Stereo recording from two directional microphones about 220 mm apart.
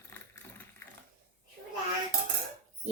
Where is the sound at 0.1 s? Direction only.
10° left (ahead or behind).